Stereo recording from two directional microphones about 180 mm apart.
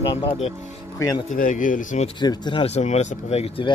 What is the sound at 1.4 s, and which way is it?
Speech, 45° left (ahead or behind).